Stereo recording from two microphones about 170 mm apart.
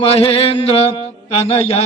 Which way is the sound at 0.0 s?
35° left (ahead or behind).